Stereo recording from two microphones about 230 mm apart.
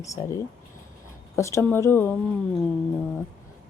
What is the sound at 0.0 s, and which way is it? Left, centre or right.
Speech, centre.